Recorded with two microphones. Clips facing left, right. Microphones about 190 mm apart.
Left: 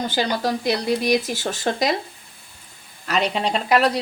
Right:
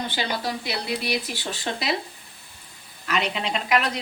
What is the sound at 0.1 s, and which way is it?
Speech, 40° left (ahead or behind).